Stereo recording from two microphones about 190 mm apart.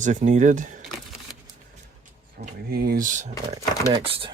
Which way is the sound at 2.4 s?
50° right (ahead or behind).